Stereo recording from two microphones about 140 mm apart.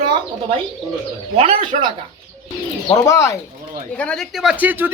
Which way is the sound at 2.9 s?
25° left (ahead or behind).